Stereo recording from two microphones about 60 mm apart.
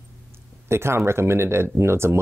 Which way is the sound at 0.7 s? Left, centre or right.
Right.